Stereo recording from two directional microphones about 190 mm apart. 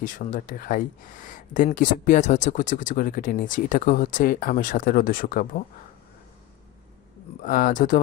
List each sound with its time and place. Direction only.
0.0 s speech: 45° left (ahead or behind)
7.4 s speech: 45° left (ahead or behind)